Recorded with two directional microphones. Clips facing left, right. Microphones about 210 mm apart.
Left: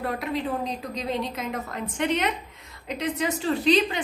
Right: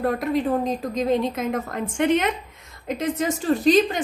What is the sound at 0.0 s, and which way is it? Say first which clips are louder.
A woman's voice: right 6 dB; 45° right (ahead or behind).